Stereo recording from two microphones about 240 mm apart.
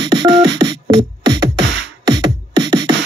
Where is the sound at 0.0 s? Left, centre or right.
Centre.